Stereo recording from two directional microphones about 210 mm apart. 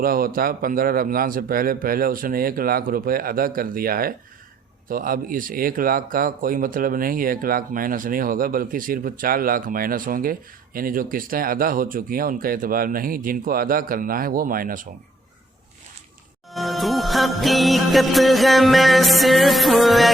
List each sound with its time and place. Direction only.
0.0 s a man's voice: 45° right (ahead or behind)
16.6 s music: centre (ahead or behind)